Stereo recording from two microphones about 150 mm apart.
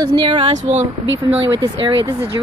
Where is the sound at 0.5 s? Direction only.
50° right (ahead or behind).